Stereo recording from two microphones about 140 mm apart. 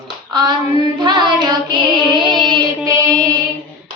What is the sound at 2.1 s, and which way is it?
Music, 30° right (ahead or behind).